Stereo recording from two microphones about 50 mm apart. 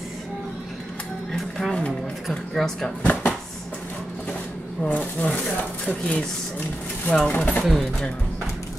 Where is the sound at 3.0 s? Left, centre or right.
Left.